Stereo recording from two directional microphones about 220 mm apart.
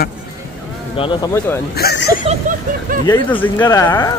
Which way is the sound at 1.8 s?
45° left (ahead or behind).